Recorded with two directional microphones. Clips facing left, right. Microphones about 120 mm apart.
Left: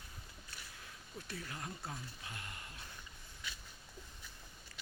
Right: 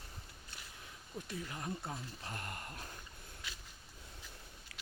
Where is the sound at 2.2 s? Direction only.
40° right (ahead or behind).